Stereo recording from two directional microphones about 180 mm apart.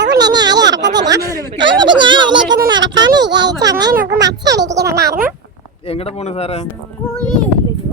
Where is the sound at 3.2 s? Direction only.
75° right (ahead or behind).